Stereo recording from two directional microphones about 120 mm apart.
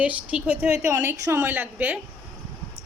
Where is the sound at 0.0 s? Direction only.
10° right (ahead or behind).